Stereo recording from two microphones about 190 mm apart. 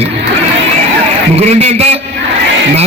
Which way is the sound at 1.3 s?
35° right (ahead or behind).